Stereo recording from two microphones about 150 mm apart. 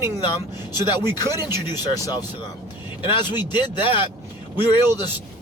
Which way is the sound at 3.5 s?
35° left (ahead or behind).